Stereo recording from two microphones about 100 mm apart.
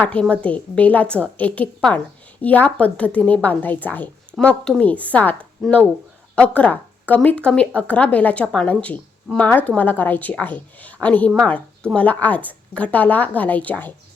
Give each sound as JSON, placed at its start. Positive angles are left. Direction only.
{"t": 0.0, "sound": "speech", "side_deg": 10}